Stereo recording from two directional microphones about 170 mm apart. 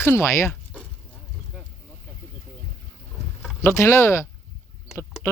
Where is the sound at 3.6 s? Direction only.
15° left (ahead or behind).